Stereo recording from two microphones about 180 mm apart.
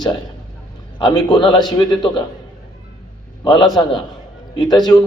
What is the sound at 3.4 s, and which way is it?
A man's voice, 25° left (ahead or behind).